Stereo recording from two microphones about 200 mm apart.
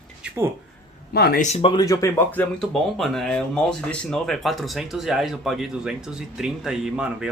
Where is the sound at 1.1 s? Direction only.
50° left (ahead or behind).